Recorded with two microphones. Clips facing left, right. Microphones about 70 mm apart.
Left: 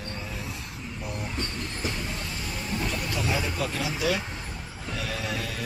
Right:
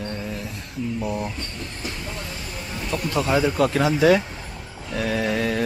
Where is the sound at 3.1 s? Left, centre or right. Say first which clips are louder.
Right 12 dB; right.